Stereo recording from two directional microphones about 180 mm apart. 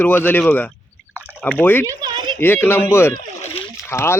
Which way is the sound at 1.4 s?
10° left (ahead or behind).